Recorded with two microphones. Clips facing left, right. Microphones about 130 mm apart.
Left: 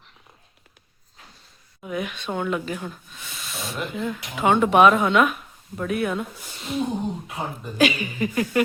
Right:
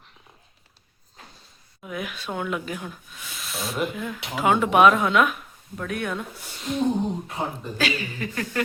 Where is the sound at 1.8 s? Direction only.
Centre (ahead or behind).